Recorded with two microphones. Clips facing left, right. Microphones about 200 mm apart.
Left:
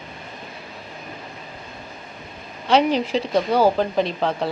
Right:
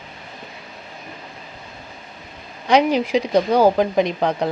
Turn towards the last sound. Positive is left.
turn(degrees=-15)  # may be behind; listen again after turning